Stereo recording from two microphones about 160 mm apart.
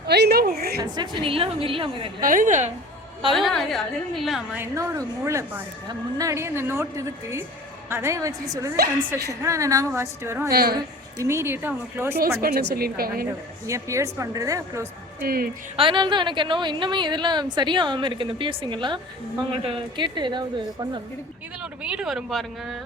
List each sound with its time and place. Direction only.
0.1 s a woman's voice: 90° right; by 0.8 s 75° right (ahead or behind)
0.8 s a woman's voice: 25° right (ahead or behind)
2.2 s a woman's voice: 55° right (ahead or behind)
3.3 s speech: centre (ahead or behind)
4.5 s a woman's voice: 15° right (ahead or behind)
10.5 s a woman's voice: 70° right (ahead or behind)
10.8 s a woman's voice: 20° right (ahead or behind)
12.1 s a woman's voice: 70° right (ahead or behind)
13.7 s a woman's voice: 20° right (ahead or behind)
15.2 s a woman's voice: 65° right (ahead or behind)
15.7 s a woman's voice: 30° right (ahead or behind)
21.6 s speech: 5° right (ahead or behind)